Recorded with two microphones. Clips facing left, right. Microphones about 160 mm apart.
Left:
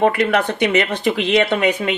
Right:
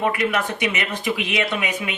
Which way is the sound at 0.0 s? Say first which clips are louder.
Left 6 dB; 60° left (ahead or behind).